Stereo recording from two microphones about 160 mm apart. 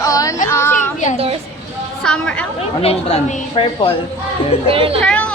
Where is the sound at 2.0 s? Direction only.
5° left (ahead or behind).